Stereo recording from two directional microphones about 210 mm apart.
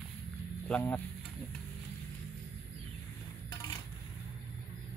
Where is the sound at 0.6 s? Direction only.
10° left (ahead or behind).